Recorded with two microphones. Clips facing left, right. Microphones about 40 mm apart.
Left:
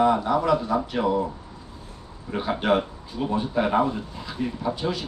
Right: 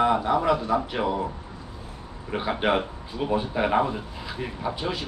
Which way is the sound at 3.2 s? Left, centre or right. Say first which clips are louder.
Even; right.